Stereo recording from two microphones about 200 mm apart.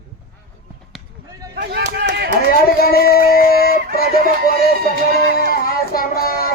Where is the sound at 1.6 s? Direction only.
55° right (ahead or behind).